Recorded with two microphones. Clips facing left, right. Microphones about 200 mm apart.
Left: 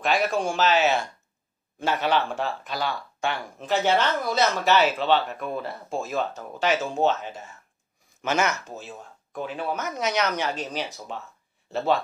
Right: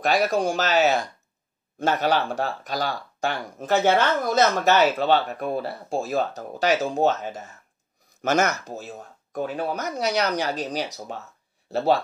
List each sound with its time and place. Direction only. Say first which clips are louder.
0.0 s speech: right 3 dB; 40° right (ahead or behind)